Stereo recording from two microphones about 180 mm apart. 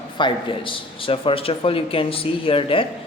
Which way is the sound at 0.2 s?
25° left (ahead or behind).